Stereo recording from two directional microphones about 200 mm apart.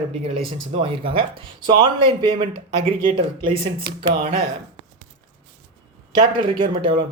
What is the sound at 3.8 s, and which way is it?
Speech, 50° right (ahead or behind).